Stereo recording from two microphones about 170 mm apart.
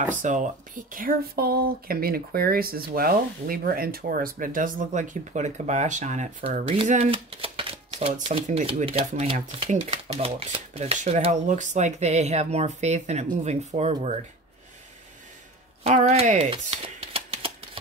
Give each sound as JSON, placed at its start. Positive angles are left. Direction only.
{"t": 0.1, "sound": "speech", "side_deg": -50}
{"t": 6.9, "sound": "typewriter", "side_deg": -35}
{"t": 8.3, "sound": "speech", "side_deg": -40}
{"t": 15.8, "sound": "speech", "side_deg": -45}